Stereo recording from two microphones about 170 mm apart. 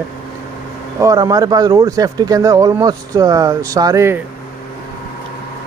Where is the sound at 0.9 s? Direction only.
20° right (ahead or behind).